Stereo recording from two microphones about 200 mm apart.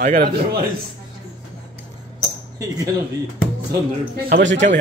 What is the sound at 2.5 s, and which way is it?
Speech, 20° right (ahead or behind).